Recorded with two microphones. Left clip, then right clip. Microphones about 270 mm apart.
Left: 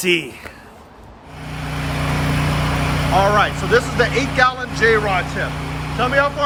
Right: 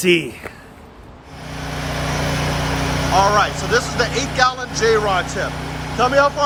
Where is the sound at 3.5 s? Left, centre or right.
Right.